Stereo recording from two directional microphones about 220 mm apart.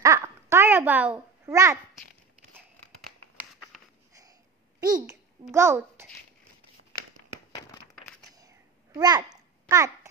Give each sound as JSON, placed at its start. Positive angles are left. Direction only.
{"t": 0.0, "sound": "babbling", "side_deg": -15}
{"t": 4.2, "sound": "babbling", "side_deg": -15}
{"t": 5.5, "sound": "a child's voice", "side_deg": -10}
{"t": 8.4, "sound": "a sound", "side_deg": -15}